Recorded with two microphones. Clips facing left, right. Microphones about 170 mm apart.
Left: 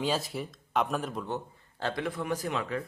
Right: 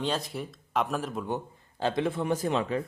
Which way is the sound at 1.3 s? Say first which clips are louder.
Right 3 dB; 15° right (ahead or behind).